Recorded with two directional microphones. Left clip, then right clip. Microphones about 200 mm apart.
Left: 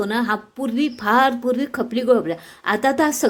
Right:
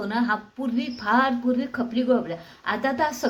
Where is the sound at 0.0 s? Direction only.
55° left (ahead or behind).